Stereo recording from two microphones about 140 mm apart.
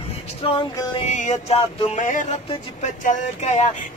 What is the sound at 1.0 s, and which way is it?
Speech, 60° left (ahead or behind).